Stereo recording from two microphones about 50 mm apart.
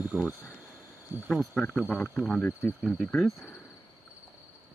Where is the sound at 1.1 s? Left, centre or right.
Right.